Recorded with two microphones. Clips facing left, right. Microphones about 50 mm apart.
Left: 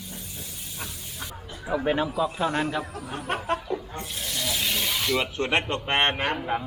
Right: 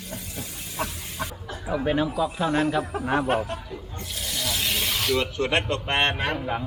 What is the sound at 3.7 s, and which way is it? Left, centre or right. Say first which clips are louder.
Snake: left 6 dB; left.